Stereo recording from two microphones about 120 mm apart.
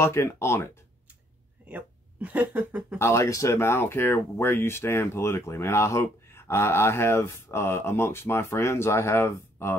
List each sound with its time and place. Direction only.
0.0 s speech: 20° left (ahead or behind)
1.7 s speech: 15° right (ahead or behind)
3.0 s speech: 25° left (ahead or behind)